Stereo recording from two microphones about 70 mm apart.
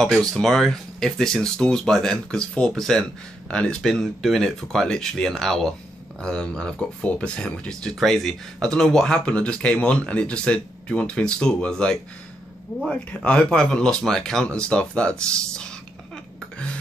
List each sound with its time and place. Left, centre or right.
0.0 s speech: centre